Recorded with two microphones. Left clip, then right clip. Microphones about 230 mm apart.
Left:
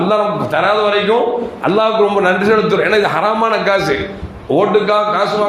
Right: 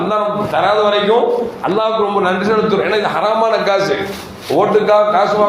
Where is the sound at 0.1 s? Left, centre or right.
Left.